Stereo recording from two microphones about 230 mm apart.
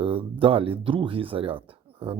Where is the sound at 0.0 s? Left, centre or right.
Right.